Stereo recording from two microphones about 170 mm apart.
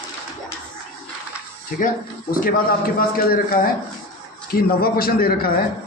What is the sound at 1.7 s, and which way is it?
Speech, 55° left (ahead or behind).